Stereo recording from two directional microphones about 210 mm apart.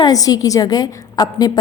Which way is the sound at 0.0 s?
15° left (ahead or behind).